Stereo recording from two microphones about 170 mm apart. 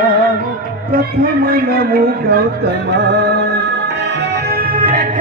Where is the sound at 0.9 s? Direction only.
60° right (ahead or behind); by 3.5 s 80° right.